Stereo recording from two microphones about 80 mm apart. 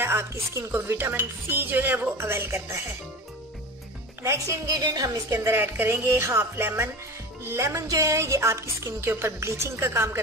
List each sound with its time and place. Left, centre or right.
0.0 s speech: right
4.2 s a woman's voice: right
5.3 s speech: right
5.6 s speech: right